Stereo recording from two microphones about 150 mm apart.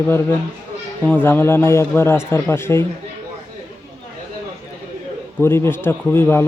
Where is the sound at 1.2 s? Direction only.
15° left (ahead or behind).